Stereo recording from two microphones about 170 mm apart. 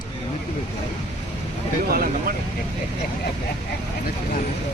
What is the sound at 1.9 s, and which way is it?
Vehicle, 60° right (ahead or behind).